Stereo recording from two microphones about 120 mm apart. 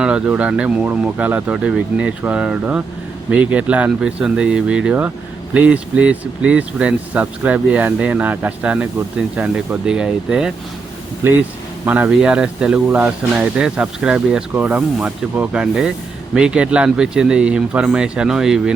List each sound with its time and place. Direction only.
0.0 s speech: 10° right (ahead or behind)
11.2 s speech: 20° right (ahead or behind); by 18.7 s 5° right (ahead or behind)